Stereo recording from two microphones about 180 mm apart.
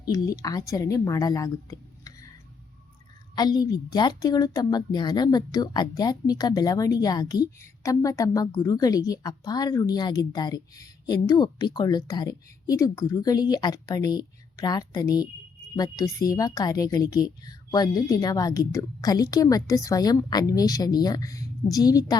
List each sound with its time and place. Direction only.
0.0 s a woman's voice: 20° left (ahead or behind)
3.3 s a woman's voice: 20° left (ahead or behind)